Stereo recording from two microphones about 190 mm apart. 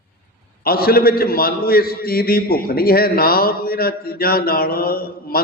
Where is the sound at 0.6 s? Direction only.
50° left (ahead or behind).